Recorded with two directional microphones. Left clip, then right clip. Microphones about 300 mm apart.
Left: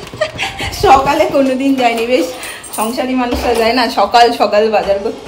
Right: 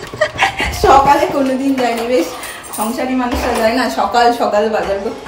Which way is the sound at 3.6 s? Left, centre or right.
Centre.